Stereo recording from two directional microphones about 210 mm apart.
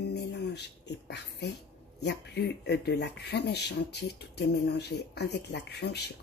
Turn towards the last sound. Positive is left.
turn(degrees=50)  # may be behind; listen again after turning